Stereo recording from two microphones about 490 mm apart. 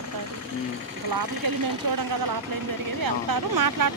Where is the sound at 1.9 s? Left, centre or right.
Right.